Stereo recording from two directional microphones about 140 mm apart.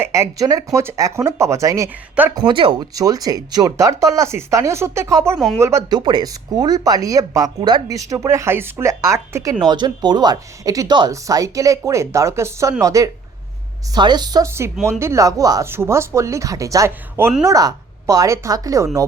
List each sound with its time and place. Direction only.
0.0 s speech: 20° right (ahead or behind)
2.3 s speech: 35° right (ahead or behind)
2.9 s speech: 25° right (ahead or behind)
6.0 s speech: 30° right (ahead or behind)